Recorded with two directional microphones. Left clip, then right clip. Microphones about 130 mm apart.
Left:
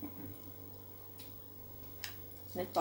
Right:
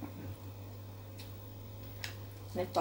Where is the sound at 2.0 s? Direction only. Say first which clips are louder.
Right 2 dB; 15° left (ahead or behind).